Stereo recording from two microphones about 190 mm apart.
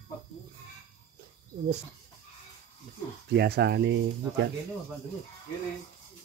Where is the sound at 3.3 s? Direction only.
60° right (ahead or behind).